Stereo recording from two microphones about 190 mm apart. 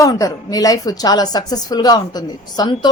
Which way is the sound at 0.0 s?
20° left (ahead or behind).